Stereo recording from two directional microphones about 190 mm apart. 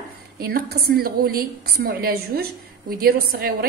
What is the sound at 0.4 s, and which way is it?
A woman's voice, 50° right (ahead or behind).